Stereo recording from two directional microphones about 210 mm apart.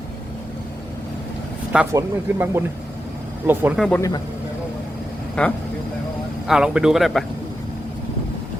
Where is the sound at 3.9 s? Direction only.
15° left (ahead or behind).